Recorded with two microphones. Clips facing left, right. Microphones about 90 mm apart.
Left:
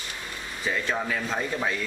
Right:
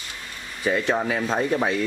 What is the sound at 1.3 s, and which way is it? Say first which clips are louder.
Speech: right 8 dB; 25° right (ahead or behind).